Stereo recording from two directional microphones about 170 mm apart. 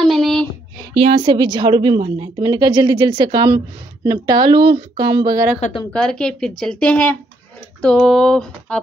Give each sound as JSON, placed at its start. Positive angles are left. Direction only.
{"t": 0.0, "sound": "a sound", "side_deg": 0}
{"t": 0.9, "sound": "a woman's voice", "side_deg": -35}
{"t": 5.6, "sound": "a woman's voice", "side_deg": 30}
{"t": 5.9, "sound": "speech", "side_deg": 5}